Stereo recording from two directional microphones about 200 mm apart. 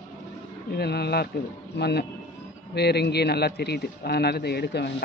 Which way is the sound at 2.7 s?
55° left (ahead or behind).